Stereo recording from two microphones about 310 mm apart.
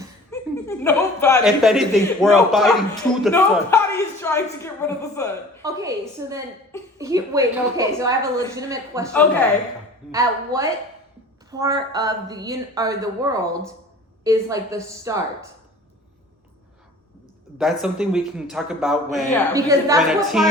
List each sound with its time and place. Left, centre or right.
0.3 s a woman's voice: centre
5.6 s a woman's voice: centre
10.1 s a woman's voice: centre
17.6 s a man's voice: centre
19.5 s a man's voice: centre